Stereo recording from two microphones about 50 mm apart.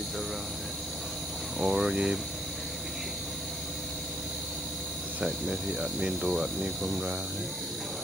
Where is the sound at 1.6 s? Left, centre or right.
Centre.